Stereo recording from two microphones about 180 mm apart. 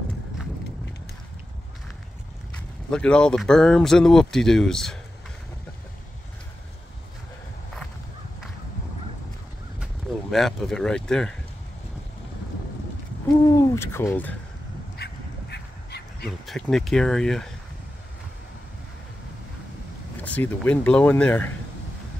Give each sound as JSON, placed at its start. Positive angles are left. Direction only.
{"t": 2.9, "sound": "speech", "side_deg": 5}
{"t": 10.3, "sound": "speech", "side_deg": 0}
{"t": 13.5, "sound": "speech", "side_deg": 15}
{"t": 15.5, "sound": "duck", "side_deg": 65}
{"t": 16.3, "sound": "speech", "side_deg": 5}
{"t": 20.2, "sound": "speech", "side_deg": 10}